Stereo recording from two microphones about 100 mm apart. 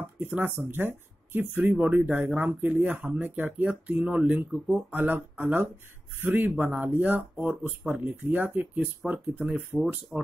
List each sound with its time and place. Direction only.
0.0 s speech: 20° right (ahead or behind)